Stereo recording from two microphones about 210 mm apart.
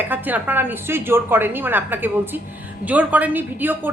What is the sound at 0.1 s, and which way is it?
A woman's voice, 10° right (ahead or behind).